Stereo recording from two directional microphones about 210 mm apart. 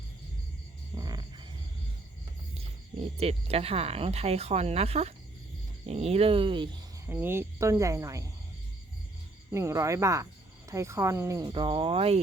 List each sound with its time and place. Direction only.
0.9 s music: 20° right (ahead or behind)
3.2 s speech: 30° right (ahead or behind)
7.1 s speech: 10° right (ahead or behind)
9.5 s speech: 15° right (ahead or behind)